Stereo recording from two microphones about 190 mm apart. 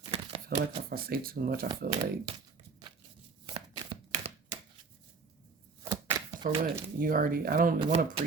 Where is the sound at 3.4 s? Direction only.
25° right (ahead or behind).